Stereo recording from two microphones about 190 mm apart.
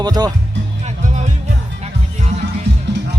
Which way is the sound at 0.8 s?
35° right (ahead or behind).